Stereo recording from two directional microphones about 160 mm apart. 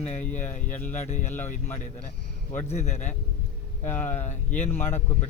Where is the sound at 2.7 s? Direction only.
45° left (ahead or behind).